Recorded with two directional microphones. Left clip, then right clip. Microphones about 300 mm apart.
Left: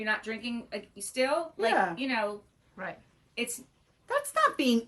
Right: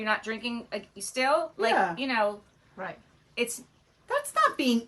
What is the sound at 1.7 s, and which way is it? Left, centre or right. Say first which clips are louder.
Speech: right 2 dB; centre.